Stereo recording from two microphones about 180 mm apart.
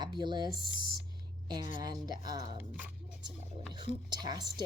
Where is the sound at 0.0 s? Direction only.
25° right (ahead or behind).